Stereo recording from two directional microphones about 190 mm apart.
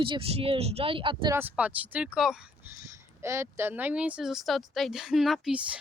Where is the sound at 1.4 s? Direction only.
10° right (ahead or behind).